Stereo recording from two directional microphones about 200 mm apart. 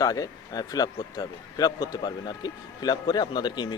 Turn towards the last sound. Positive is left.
turn(degrees=20)  # may be behind; listen again after turning